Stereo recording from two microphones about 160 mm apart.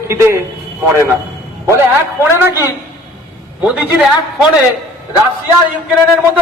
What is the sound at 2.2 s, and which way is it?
Speech, 15° right (ahead or behind).